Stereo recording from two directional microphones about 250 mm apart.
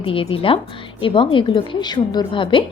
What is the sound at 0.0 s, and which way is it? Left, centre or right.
A woman's voice, left.